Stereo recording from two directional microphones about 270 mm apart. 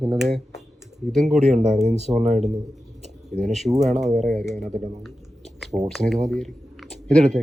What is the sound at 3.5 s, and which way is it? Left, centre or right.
Speech, centre.